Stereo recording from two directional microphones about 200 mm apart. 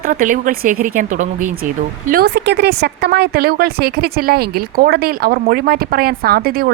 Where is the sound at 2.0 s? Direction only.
50° right (ahead or behind).